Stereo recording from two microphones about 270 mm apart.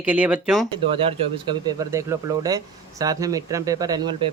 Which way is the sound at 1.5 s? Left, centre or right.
Centre.